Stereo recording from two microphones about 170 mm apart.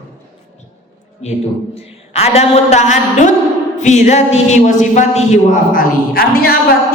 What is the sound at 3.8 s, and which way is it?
A man's voice, 45° left (ahead or behind).